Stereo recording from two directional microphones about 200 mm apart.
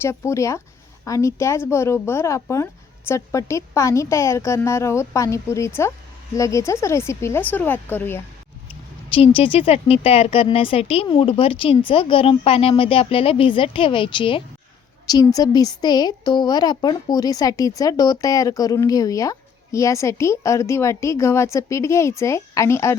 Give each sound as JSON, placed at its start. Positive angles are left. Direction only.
{"t": 0.0, "sound": "speech", "side_deg": 15}
{"t": 9.1, "sound": "speech", "side_deg": 25}